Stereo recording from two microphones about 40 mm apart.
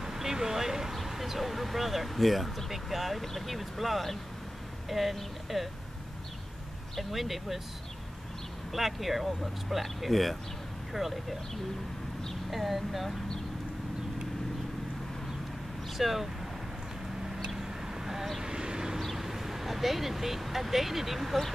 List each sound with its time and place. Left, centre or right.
0.0 s vehicle: centre
0.9 s speech: centre
7.0 s speech: centre
8.7 s speech: centre
12.4 s speech: centre
16.0 s speech: centre
17.5 s vehicle: centre
18.4 s vehicle: centre
18.9 s speech: centre